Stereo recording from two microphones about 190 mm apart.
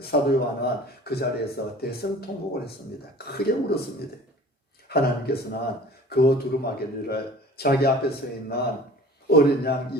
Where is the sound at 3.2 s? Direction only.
55° left (ahead or behind).